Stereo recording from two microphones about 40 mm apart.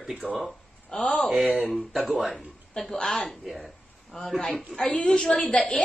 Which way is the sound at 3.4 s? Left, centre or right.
Centre.